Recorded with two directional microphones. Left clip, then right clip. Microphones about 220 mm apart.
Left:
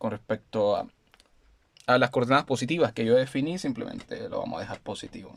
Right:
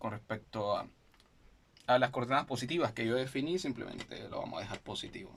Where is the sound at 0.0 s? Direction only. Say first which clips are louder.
Left 9 dB; 45° left (ahead or behind).